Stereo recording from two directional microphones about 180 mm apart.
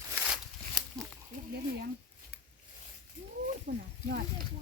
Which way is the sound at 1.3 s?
45° right (ahead or behind).